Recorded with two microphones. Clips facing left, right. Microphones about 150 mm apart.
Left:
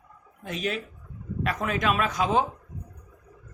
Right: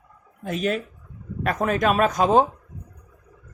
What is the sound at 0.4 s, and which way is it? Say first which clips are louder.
Speech: right 6 dB; 50° right (ahead or behind).